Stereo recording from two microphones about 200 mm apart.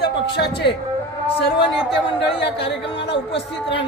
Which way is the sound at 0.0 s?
55° left (ahead or behind).